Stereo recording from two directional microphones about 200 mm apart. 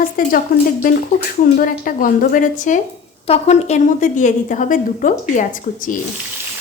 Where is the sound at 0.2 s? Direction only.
45° left (ahead or behind).